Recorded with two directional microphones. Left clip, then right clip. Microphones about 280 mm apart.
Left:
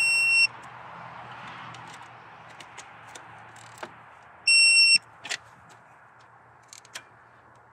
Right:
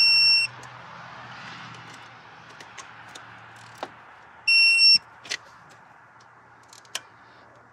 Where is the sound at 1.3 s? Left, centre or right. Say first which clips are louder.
Right 1 dB; left.